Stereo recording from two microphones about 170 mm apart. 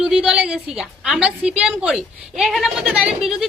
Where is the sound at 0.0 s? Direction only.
5° right (ahead or behind).